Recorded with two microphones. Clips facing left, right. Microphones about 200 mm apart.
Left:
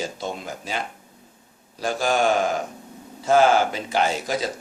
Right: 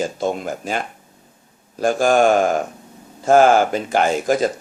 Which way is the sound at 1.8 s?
50° right (ahead or behind).